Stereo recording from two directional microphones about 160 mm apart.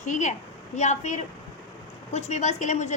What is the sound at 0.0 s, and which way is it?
A woman's voice, 50° left (ahead or behind).